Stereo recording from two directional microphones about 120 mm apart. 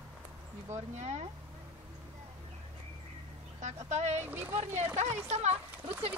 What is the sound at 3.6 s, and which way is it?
Speech, 70° right (ahead or behind).